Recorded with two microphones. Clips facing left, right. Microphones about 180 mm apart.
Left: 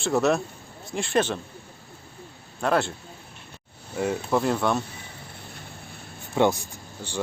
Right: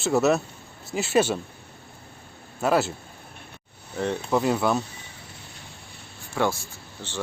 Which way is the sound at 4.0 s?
5° left (ahead or behind).